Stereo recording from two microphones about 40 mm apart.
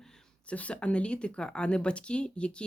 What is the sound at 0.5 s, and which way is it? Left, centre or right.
Speech, left.